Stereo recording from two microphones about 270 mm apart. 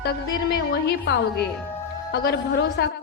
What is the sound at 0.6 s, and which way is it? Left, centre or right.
Music, left.